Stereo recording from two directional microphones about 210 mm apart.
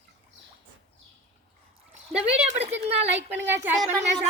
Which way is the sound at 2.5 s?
30° right (ahead or behind).